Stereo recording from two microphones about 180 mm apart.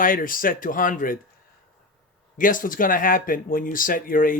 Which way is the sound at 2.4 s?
50° left (ahead or behind).